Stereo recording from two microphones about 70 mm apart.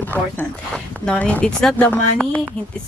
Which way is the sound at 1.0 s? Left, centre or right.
Centre.